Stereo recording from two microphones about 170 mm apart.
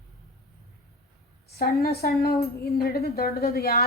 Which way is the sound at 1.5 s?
65° left (ahead or behind).